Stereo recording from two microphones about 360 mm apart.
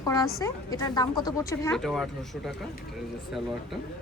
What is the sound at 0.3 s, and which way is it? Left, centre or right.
Speech, centre.